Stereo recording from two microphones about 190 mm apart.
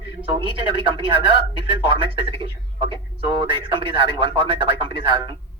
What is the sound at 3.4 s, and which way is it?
Speech, 25° right (ahead or behind).